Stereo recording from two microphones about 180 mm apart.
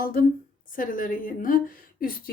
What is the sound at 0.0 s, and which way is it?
A woman's voice, 55° left (ahead or behind).